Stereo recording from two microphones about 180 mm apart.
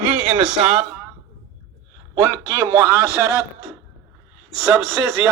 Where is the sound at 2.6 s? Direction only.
15° right (ahead or behind).